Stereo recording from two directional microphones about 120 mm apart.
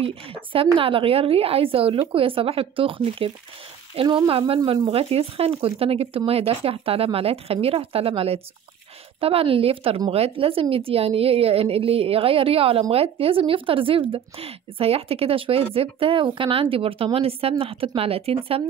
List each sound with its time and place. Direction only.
0.0 s speech: 50° right (ahead or behind)